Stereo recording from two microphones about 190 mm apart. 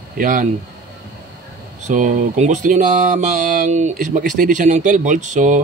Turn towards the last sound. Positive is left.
turn(degrees=-40)  # may be behind; listen again after turning